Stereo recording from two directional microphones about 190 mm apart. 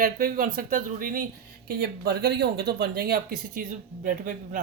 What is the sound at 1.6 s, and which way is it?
Speech, 60° right (ahead or behind).